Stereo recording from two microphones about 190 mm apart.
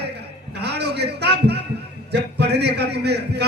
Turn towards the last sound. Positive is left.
turn(degrees=-60)  # may be behind; listen again after turning